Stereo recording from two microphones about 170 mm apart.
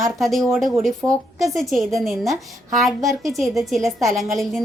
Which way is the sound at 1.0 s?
15° right (ahead or behind).